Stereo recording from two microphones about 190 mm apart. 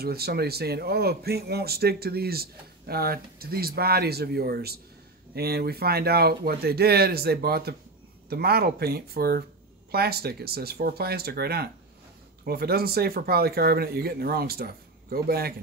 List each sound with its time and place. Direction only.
0.0 s speech: 55° right (ahead or behind)